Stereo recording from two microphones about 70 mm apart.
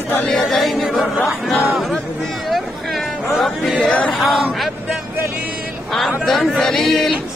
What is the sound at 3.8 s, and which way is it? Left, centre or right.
Choir, centre.